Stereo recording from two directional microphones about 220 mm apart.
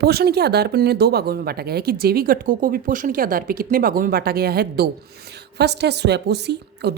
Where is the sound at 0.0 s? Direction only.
45° right (ahead or behind).